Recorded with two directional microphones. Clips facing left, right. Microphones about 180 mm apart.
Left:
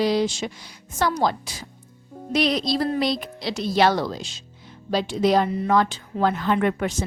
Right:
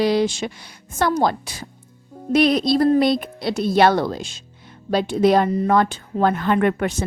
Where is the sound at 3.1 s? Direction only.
55° right (ahead or behind).